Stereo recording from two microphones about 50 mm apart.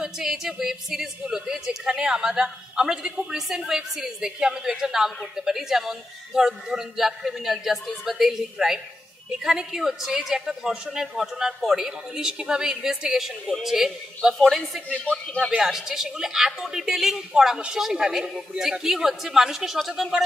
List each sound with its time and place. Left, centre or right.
0.0 s a woman's voice: centre
14.9 s speech: left
15.5 s a woman's voice: centre